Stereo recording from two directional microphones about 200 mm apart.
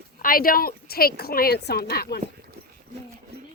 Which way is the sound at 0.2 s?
45° left (ahead or behind).